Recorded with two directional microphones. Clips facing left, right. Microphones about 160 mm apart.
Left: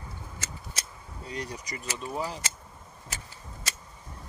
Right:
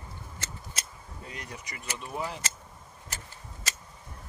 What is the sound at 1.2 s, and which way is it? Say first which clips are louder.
Speech: left 6 dB; 35° left (ahead or behind).